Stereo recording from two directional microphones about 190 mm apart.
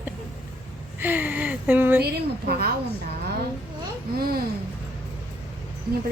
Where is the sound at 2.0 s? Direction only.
55° right (ahead or behind).